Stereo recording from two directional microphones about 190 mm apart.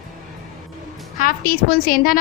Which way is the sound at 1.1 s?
50° left (ahead or behind).